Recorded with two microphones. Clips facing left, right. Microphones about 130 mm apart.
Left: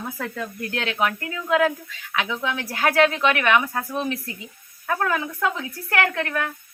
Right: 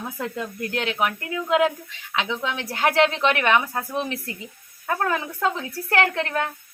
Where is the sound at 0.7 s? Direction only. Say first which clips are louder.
Left 1 dB; 15° right (ahead or behind).